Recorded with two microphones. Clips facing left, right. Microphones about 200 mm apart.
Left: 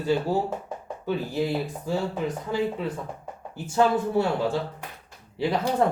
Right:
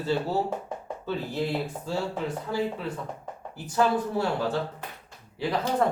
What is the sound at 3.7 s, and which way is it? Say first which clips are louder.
Speech: left 2 dB; 25° left (ahead or behind).